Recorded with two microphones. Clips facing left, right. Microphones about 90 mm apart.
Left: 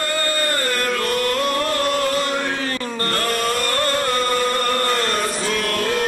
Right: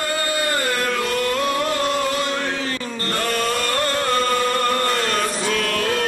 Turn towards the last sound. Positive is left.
turn(degrees=5)  # may be behind; listen again after turning